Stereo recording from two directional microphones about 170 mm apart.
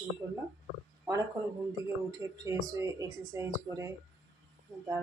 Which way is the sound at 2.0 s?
20° right (ahead or behind).